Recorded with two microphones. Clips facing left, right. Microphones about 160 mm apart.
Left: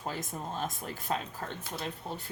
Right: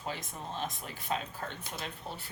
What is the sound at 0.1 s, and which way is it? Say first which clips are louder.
Speech: left 2 dB; 45° left (ahead or behind).